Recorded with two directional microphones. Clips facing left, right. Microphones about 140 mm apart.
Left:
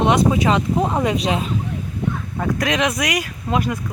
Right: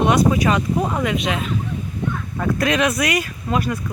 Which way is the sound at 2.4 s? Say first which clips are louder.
Right 1 dB; 15° left (ahead or behind).